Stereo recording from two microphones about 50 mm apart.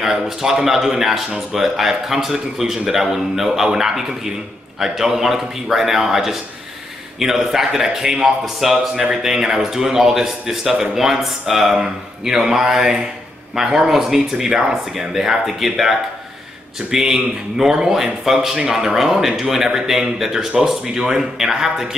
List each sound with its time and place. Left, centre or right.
0.0 s a man's voice: centre